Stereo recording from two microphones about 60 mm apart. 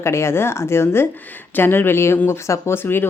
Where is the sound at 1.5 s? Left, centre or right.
Left.